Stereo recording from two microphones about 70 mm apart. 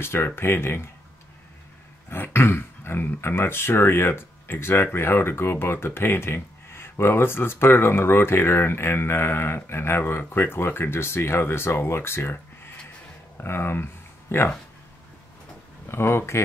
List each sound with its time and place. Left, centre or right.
0.0 s speech: left
2.0 s speech: left
15.9 s speech: left